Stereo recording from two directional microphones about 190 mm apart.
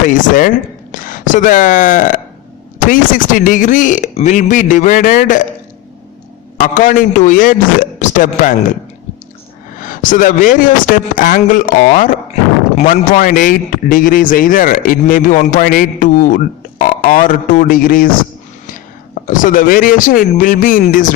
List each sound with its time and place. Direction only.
0.1 s a man's voice: 45° left (ahead or behind)
6.6 s a man's voice: 40° left (ahead or behind)
9.8 s a man's voice: 45° left (ahead or behind)
19.3 s a man's voice: 45° left (ahead or behind)